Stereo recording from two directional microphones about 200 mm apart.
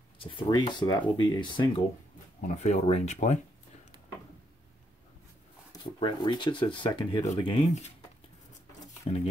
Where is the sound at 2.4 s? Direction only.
35° left (ahead or behind).